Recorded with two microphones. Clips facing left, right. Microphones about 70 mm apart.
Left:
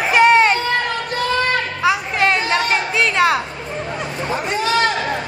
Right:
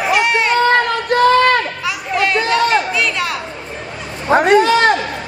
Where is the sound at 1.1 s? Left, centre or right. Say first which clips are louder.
Right 9 dB; right.